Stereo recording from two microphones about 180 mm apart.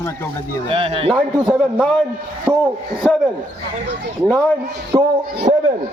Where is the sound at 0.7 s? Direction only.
30° right (ahead or behind).